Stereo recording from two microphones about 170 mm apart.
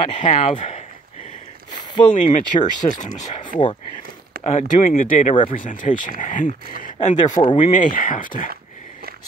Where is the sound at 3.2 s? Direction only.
45° left (ahead or behind).